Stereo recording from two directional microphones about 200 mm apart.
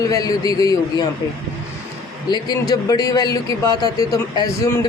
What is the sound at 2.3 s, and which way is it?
A man's voice, 20° left (ahead or behind).